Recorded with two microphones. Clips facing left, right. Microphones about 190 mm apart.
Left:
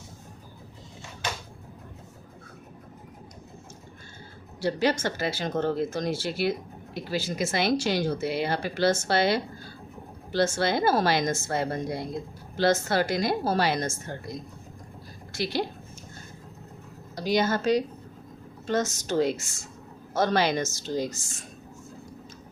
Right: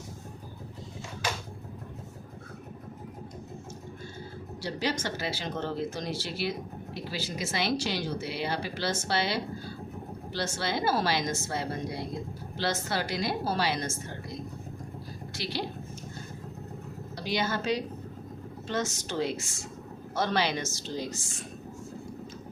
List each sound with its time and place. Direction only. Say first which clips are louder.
4.6 s speech: left 7 dB; 50° left (ahead or behind)
15.3 s a woman's voice: left 6 dB; 50° left (ahead or behind)
17.2 s speech: left 6 dB; 45° left (ahead or behind)